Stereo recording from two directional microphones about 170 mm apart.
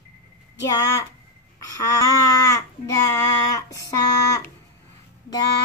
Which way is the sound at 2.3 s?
20° left (ahead or behind).